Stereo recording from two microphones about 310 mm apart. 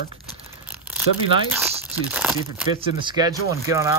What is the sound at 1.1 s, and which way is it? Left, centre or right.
Speech, left.